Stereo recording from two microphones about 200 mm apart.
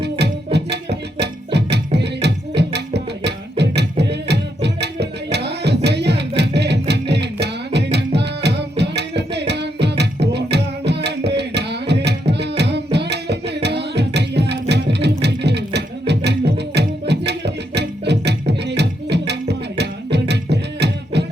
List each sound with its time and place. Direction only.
0.0 s music: 55° right (ahead or behind)
2.6 s tabla: 55° right (ahead or behind)
3.6 s music: 55° right (ahead or behind)
8.4 s tabla: 55° right (ahead or behind)
9.0 s a sound: 60° right (ahead or behind)
10.0 s carnatic music: 55° right (ahead or behind)
15.2 s music: 55° right (ahead or behind)